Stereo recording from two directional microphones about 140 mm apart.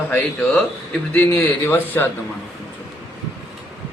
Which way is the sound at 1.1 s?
15° left (ahead or behind).